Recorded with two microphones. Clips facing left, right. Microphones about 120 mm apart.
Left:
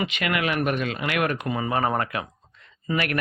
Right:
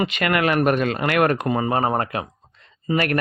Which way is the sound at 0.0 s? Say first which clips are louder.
Right 5 dB; 45° right (ahead or behind).